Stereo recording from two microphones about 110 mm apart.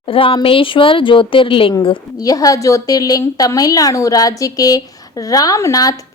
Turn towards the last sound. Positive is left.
turn(degrees=35)  # may be behind; listen again after turning